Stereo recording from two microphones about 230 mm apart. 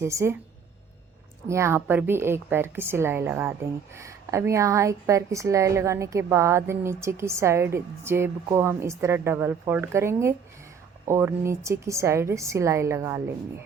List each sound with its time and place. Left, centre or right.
0.0 s a woman's voice: centre
1.5 s a woman's voice: centre